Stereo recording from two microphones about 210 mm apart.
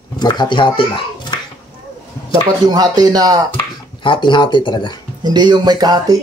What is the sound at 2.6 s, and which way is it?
Speech, 20° right (ahead or behind).